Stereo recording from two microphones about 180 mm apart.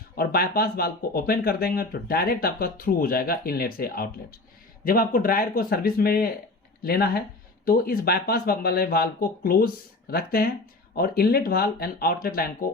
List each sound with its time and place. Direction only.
0.2 s speech: 55° left (ahead or behind)